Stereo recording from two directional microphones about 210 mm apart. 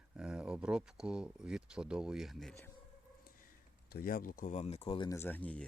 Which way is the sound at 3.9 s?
45° left (ahead or behind).